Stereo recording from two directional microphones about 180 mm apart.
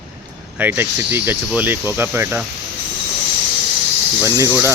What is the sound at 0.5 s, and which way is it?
Speech, 10° right (ahead or behind).